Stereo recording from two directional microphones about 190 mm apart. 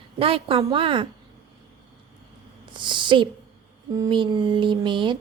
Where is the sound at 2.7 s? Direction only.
25° right (ahead or behind).